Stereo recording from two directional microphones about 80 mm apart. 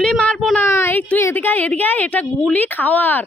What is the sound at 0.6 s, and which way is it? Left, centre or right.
A woman's voice, left.